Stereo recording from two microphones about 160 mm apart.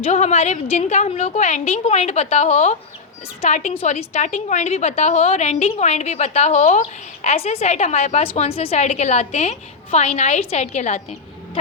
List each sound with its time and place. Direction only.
0.0 s a woman's voice: 45° left (ahead or behind)